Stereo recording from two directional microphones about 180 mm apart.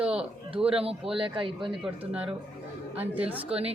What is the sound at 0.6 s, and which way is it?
Speech, 5° right (ahead or behind).